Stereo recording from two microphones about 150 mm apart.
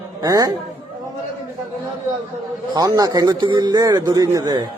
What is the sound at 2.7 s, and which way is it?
Speech, 25° right (ahead or behind).